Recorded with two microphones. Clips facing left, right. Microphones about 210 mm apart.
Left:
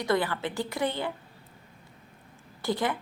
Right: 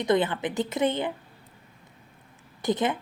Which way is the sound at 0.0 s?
20° right (ahead or behind).